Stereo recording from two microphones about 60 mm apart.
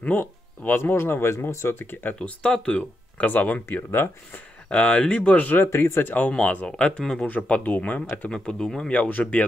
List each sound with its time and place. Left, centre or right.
0.0 s speech: left
2.1 s speech: centre
3.3 s speech: left
4.6 s speech: centre
5.7 s speech: left
6.3 s speech: centre
8.1 s speech: centre
8.9 s speech: left